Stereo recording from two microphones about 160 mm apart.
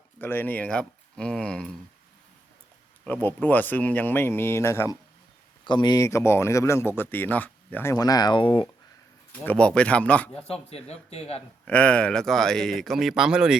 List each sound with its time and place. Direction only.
0.2 s speech: 10° left (ahead or behind)
3.0 s speech: 10° left (ahead or behind)
5.6 s speech: 30° left (ahead or behind)
9.3 s speech: 10° left (ahead or behind)
10.7 s speech: 40° left (ahead or behind)
11.6 s speech: 10° left (ahead or behind)